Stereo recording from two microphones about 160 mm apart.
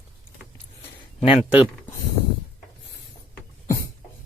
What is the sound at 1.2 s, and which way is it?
Speech, 35° left (ahead or behind).